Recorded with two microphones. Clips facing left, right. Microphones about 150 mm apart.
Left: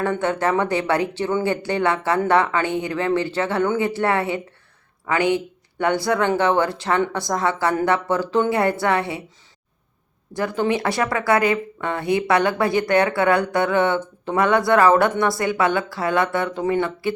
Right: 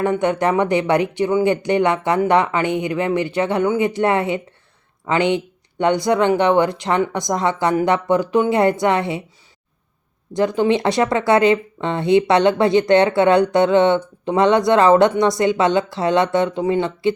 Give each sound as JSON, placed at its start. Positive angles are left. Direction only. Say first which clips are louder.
{"t": 0.0, "sound": "speech", "louder": "right 3 dB", "side_deg": -15}
{"t": 10.3, "sound": "speech", "louder": "right 5 dB", "side_deg": -20}